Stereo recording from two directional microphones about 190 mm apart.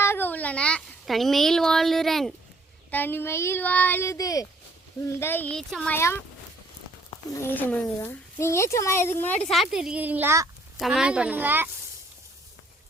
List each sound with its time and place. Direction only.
0.0 s a child's voice: 10° left (ahead or behind)
7.4 s speech: 10° left (ahead or behind); by 10.5 s 15° right (ahead or behind)
10.8 s a woman's voice: 5° right (ahead or behind)